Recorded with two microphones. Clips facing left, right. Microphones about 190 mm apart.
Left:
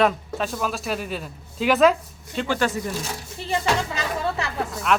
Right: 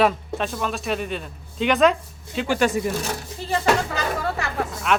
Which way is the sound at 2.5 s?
15° right (ahead or behind).